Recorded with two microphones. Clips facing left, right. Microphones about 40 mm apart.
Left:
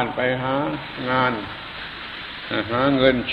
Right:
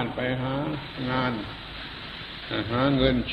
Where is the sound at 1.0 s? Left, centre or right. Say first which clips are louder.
Left 7 dB; left.